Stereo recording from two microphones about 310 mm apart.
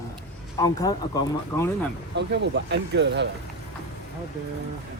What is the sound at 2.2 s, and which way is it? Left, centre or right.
Speech, right.